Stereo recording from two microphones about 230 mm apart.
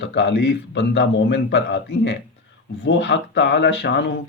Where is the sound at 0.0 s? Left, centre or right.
Left.